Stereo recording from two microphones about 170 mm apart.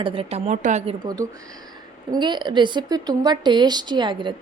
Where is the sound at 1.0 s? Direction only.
20° right (ahead or behind).